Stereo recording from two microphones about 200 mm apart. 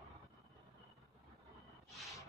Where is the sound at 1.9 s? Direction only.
Centre (ahead or behind).